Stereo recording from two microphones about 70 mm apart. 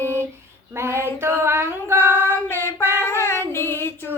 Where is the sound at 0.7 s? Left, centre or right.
Right.